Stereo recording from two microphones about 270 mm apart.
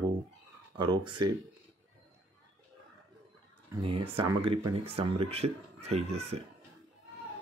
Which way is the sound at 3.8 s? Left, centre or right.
Centre.